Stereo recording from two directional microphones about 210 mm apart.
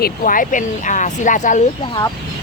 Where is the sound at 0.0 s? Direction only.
40° left (ahead or behind).